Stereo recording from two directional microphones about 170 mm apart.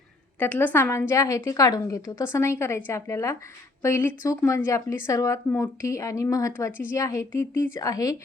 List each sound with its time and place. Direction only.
0.3 s a woman's voice: 10° left (ahead or behind)